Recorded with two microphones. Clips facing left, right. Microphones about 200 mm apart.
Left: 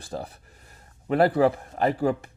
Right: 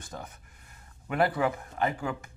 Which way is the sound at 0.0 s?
35° left (ahead or behind).